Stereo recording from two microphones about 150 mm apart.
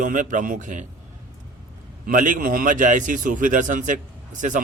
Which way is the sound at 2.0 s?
60° right (ahead or behind).